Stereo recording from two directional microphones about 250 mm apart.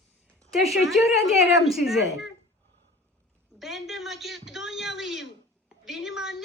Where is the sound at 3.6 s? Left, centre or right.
Centre.